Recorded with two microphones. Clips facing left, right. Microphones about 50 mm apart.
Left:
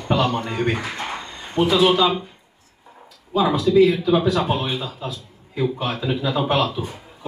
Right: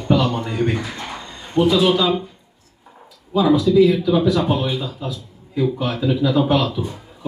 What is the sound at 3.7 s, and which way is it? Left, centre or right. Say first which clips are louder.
Speech: right 1 dB; left.